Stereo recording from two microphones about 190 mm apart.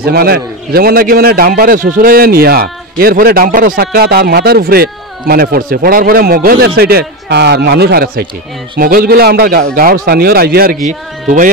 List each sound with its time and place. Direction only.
0.0 s a man's voice: 55° right (ahead or behind)
10.9 s a man's voice: 45° right (ahead or behind)